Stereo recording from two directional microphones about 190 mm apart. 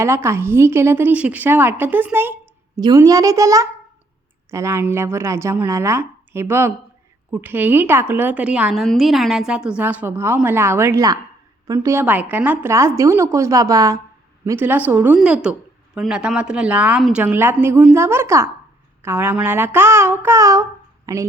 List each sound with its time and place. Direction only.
0.0 s a woman's voice: 15° right (ahead or behind)